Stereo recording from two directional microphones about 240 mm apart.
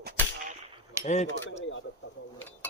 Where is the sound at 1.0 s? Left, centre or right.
Left.